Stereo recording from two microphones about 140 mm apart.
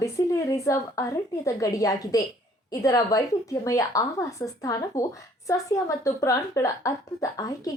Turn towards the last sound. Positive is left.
turn(degrees=25)  # may be behind; listen again after turning